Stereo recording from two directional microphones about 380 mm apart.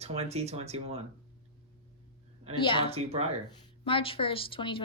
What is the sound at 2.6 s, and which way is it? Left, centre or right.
Speech, centre.